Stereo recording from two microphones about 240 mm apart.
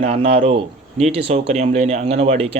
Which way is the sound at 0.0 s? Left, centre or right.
Right.